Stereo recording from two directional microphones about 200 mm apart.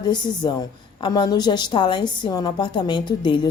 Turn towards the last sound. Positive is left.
turn(degrees=25)  # may be behind; listen again after turning